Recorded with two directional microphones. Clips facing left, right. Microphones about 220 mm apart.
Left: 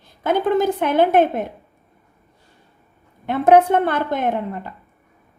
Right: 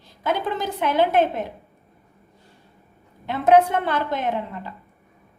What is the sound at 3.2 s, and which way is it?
A woman's voice, 55° left (ahead or behind).